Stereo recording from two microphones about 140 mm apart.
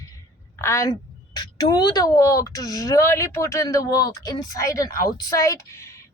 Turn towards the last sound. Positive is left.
turn(degrees=20)  # may be behind; listen again after turning